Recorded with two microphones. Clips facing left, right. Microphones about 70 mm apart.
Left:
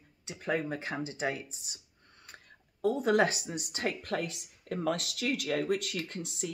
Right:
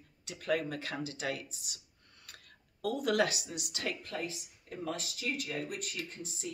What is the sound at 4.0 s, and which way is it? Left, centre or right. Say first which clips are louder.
Speech: left 5 dB; left.